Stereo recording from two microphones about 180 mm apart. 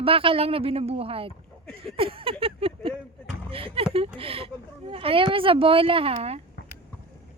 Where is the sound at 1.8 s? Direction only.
30° right (ahead or behind).